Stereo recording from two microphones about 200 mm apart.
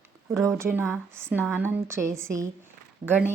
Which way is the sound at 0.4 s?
10° right (ahead or behind).